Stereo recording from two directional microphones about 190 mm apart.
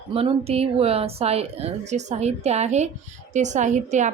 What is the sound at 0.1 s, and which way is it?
A woman's voice, 30° right (ahead or behind).